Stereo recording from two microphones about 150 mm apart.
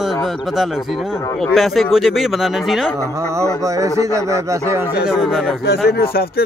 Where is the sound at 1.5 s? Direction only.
Centre (ahead or behind).